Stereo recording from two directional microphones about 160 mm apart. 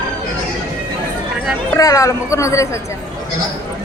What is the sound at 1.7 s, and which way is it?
A woman's voice, 20° left (ahead or behind).